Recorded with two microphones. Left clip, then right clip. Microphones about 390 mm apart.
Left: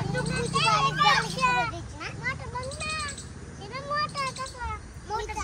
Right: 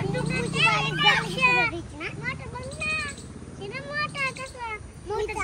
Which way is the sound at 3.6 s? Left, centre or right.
Centre.